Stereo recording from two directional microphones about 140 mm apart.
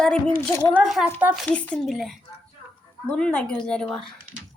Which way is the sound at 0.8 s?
Centre (ahead or behind).